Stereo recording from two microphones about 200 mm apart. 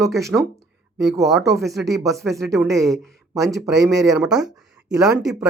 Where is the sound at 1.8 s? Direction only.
Centre (ahead or behind).